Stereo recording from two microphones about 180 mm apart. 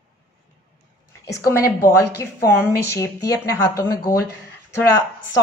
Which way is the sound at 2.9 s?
15° left (ahead or behind).